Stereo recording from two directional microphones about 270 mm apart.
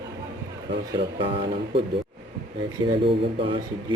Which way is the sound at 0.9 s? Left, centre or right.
Centre.